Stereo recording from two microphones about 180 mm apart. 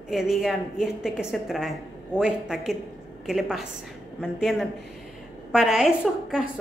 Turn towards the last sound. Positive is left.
turn(degrees=-5)  # may be behind; listen again after turning